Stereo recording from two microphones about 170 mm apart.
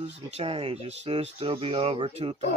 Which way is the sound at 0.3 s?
35° right (ahead or behind).